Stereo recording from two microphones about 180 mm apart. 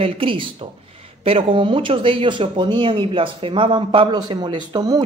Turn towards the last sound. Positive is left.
turn(degrees=-20)  # may be behind; listen again after turning